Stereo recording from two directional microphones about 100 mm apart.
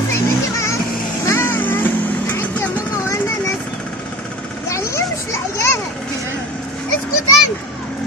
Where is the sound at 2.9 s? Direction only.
30° left (ahead or behind).